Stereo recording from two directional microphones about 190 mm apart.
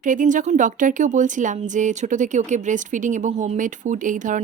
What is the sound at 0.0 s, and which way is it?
A woman's voice, 45° right (ahead or behind).